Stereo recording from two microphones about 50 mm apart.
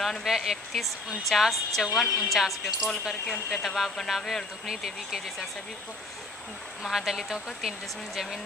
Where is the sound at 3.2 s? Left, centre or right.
Left.